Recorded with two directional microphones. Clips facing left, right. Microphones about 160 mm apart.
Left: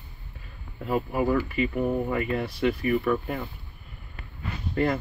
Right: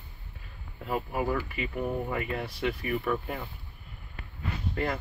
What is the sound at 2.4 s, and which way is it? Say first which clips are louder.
Speech: left 6 dB; 10° right (ahead or behind).